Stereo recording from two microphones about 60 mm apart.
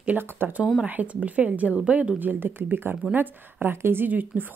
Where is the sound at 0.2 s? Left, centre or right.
Right.